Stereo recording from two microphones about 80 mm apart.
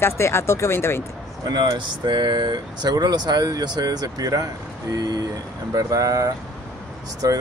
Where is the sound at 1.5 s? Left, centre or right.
Right.